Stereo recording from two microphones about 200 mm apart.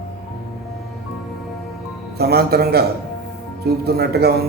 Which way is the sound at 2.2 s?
50° right (ahead or behind).